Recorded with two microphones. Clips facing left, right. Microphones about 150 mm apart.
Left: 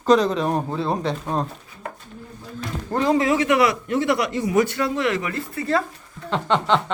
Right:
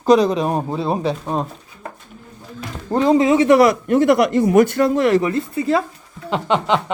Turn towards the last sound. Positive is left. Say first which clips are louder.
# right 2 dB
turn(degrees=-10)  # may be behind; listen again after turning